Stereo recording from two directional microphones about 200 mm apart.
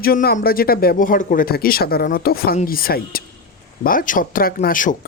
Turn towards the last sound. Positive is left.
turn(degrees=40)  # may be behind; listen again after turning